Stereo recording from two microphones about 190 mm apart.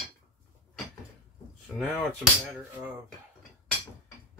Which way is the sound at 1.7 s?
Centre (ahead or behind).